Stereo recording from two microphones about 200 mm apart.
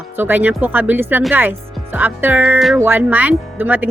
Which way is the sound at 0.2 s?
10° right (ahead or behind).